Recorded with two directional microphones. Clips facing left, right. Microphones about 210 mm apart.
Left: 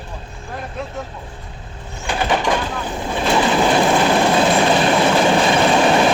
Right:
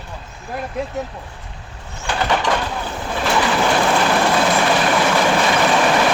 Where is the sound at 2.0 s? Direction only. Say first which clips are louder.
Left 1 dB; 20° left (ahead or behind).